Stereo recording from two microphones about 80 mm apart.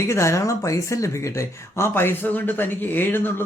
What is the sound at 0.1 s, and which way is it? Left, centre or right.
Speech, left.